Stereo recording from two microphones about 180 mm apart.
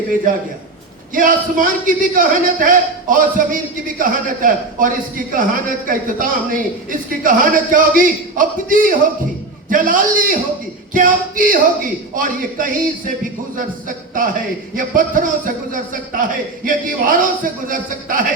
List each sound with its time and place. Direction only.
1.1 s speech: 50° right (ahead or behind)